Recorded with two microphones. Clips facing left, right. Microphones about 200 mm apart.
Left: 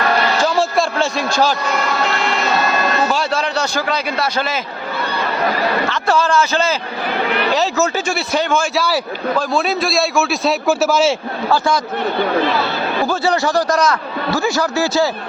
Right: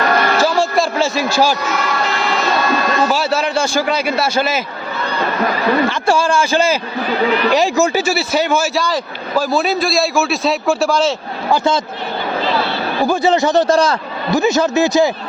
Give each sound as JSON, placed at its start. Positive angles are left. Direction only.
{"t": 0.4, "sound": "a man's voice", "side_deg": 0}
{"t": 3.1, "sound": "a man's voice", "side_deg": -5}
{"t": 5.9, "sound": "a man's voice", "side_deg": -10}
{"t": 11.5, "sound": "a man's voice", "side_deg": -25}
{"t": 13.1, "sound": "a man's voice", "side_deg": -20}